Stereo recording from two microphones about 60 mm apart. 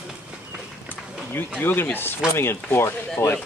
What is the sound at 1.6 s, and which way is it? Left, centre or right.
Speech, left.